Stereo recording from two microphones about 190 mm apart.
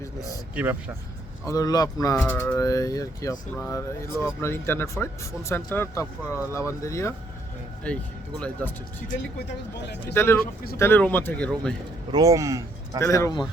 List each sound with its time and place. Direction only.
0.5 s speech: 10° right (ahead or behind)
1.5 s speech: 20° left (ahead or behind)
10.1 s speech: 10° left (ahead or behind)
12.1 s speech: 15° right (ahead or behind)
13.0 s speech: 15° left (ahead or behind)